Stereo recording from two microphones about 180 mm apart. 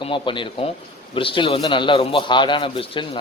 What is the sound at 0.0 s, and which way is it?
Speech, 30° left (ahead or behind).